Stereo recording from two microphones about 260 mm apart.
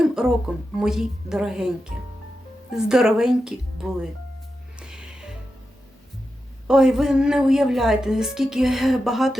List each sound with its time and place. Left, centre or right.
0.0 s a woman's voice: centre
2.9 s a woman's voice: centre
4.8 s music: centre
6.7 s a woman's voice: centre